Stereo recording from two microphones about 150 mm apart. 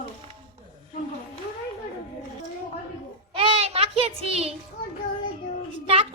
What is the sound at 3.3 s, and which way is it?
Child singing, 40° right (ahead or behind).